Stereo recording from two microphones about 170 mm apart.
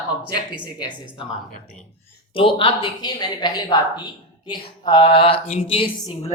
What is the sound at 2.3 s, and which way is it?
Speech, 30° left (ahead or behind).